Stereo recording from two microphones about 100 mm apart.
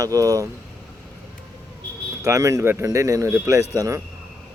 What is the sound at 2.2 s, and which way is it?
Speech, 30° right (ahead or behind).